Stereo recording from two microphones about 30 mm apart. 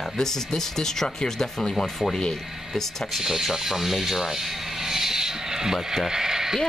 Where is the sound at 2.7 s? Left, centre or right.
Centre.